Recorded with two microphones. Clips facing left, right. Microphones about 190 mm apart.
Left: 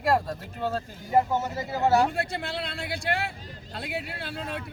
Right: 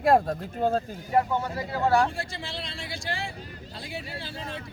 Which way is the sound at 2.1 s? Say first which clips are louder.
Left 5 dB; 60° left (ahead or behind).